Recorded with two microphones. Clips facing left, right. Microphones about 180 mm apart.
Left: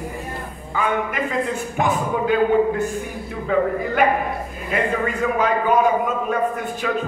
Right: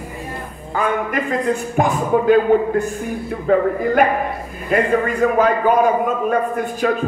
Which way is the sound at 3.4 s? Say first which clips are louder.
Right 4 dB; 45° right (ahead or behind).